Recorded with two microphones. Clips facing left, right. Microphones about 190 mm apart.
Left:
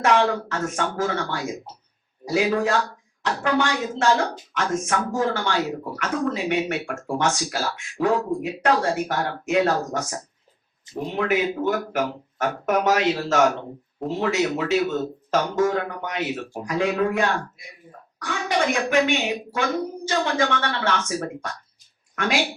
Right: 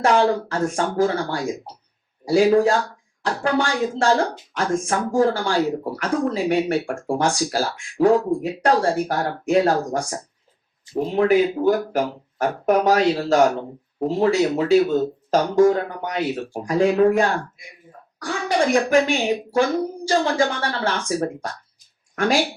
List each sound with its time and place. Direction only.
0.0 s speech: 35° right (ahead or behind)